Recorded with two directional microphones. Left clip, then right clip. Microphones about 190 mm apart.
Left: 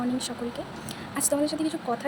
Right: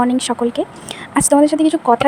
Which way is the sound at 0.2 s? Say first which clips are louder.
Right 15 dB; 50° right (ahead or behind).